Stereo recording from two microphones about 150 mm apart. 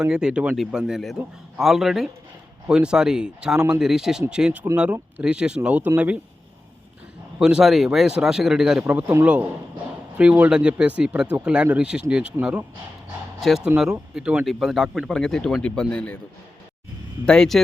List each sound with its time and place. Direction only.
0.0 s speech: 5° right (ahead or behind)
7.3 s speech: 5° right (ahead or behind)
13.7 s speech: 15° right (ahead or behind); by 16.1 s 10° left (ahead or behind)
17.2 s speech: 5° left (ahead or behind)